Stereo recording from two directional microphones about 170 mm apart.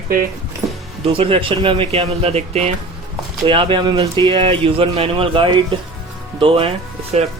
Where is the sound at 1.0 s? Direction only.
35° right (ahead or behind).